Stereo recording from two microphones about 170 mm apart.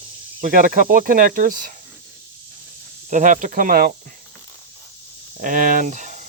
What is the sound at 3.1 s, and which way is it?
Speech, 50° right (ahead or behind).